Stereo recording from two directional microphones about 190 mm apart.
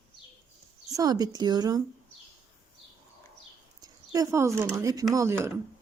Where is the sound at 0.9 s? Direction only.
20° right (ahead or behind).